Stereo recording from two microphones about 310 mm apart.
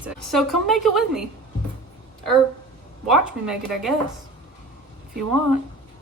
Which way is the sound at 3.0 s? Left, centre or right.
Centre.